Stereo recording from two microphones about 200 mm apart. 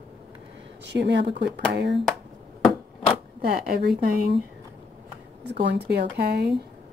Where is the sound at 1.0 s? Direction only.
60° right (ahead or behind).